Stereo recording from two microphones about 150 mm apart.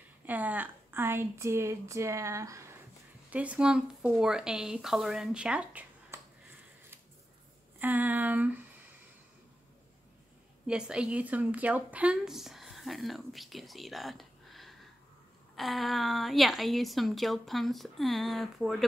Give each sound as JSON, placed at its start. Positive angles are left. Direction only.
{"t": 0.3, "sound": "speech", "side_deg": -10}
{"t": 3.3, "sound": "a woman's voice", "side_deg": -10}
{"t": 7.8, "sound": "a sound", "side_deg": -10}
{"t": 10.7, "sound": "a woman's voice", "side_deg": -5}